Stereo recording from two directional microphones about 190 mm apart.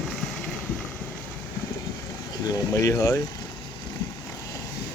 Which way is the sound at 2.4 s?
20° left (ahead or behind).